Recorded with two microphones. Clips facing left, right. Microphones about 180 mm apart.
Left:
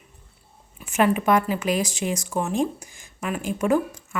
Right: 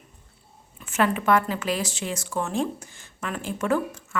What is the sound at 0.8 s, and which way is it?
Speech, 15° left (ahead or behind).